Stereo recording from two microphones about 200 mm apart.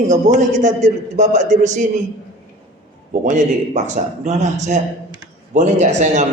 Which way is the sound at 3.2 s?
40° right (ahead or behind).